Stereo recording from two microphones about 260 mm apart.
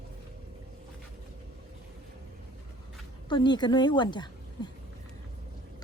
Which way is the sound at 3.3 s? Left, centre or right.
Centre.